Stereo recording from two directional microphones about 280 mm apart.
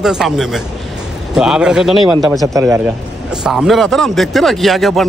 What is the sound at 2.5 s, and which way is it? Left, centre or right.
Speech, centre.